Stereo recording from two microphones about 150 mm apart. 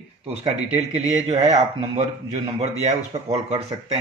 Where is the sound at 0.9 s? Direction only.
45° right (ahead or behind).